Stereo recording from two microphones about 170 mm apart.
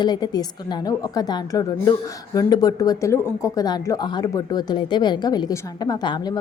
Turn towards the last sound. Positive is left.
turn(degrees=25)  # may be behind; listen again after turning